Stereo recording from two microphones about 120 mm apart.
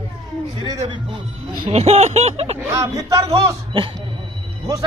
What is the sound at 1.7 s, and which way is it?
Speech, 65° right (ahead or behind).